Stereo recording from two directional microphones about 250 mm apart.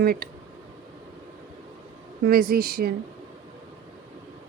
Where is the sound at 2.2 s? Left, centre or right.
Right.